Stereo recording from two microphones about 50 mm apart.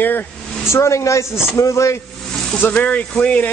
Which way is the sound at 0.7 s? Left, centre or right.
Left.